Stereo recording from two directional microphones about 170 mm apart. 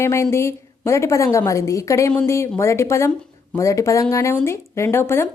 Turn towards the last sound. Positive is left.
turn(degrees=15)  # may be behind; listen again after turning